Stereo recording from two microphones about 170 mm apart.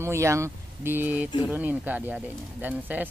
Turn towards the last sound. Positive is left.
turn(degrees=-10)  # may be behind; listen again after turning